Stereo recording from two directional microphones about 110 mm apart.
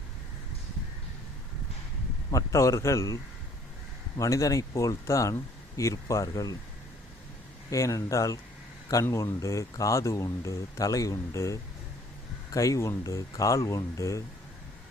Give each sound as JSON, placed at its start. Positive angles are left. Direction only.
{"t": 2.3, "sound": "speech", "side_deg": 30}
{"t": 4.2, "sound": "speech", "side_deg": 30}
{"t": 7.7, "sound": "speech", "side_deg": 30}